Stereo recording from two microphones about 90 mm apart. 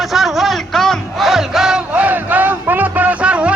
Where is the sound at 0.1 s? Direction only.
Centre (ahead or behind).